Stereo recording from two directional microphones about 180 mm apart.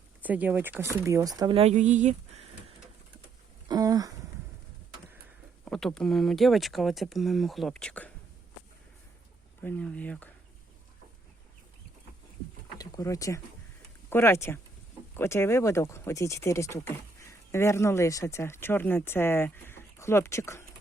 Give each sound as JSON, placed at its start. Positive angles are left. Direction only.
{"t": 0.2, "sound": "speech", "side_deg": -10}
{"t": 3.7, "sound": "a sound", "side_deg": -20}
{"t": 5.6, "sound": "speech", "side_deg": 0}
{"t": 9.6, "sound": "speech", "side_deg": 10}
{"t": 12.7, "sound": "a sound", "side_deg": 20}
{"t": 14.1, "sound": "speech", "side_deg": 15}